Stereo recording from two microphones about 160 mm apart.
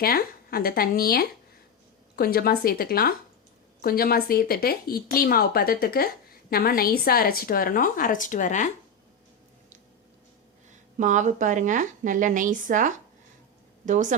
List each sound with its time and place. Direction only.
0.0 s a woman's voice: 70° left (ahead or behind); by 8.7 s 55° left (ahead or behind)
10.7 s speech: 50° right (ahead or behind)